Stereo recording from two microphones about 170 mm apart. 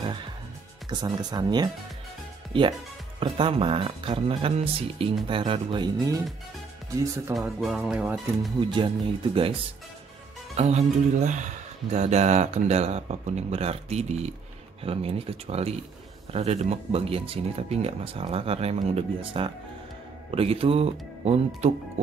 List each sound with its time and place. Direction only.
0.8 s speech: 25° right (ahead or behind)
7.3 s speech: 20° right (ahead or behind)
7.6 s speech: 5° right (ahead or behind)
8.5 s speech: 30° right (ahead or behind)
10.5 s speech: 40° right (ahead or behind)